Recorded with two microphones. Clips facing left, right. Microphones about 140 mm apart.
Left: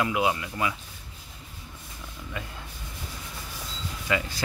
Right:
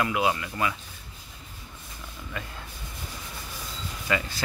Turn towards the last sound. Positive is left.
turn(degrees=15)  # may be behind; listen again after turning